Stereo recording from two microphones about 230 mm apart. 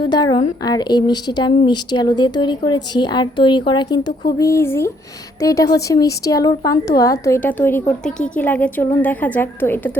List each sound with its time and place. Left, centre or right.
0.0 s a woman's voice: centre